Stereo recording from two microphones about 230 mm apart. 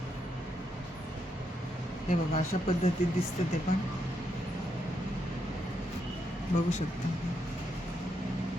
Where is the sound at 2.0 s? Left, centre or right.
Left.